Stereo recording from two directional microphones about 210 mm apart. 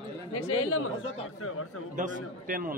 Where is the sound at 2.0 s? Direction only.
40° right (ahead or behind).